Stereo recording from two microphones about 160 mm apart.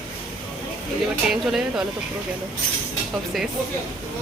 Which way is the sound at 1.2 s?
5° right (ahead or behind).